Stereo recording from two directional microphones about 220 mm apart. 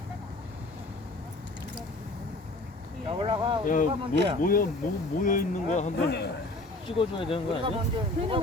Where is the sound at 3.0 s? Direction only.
20° right (ahead or behind).